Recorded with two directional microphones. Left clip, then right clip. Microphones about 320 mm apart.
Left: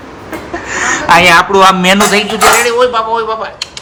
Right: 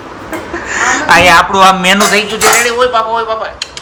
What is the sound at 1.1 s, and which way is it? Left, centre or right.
Speech, centre.